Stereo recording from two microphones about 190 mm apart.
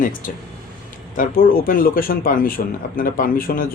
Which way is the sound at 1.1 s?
45° left (ahead or behind).